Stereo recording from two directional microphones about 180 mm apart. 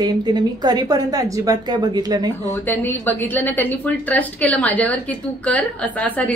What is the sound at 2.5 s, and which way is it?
Speech, 10° left (ahead or behind).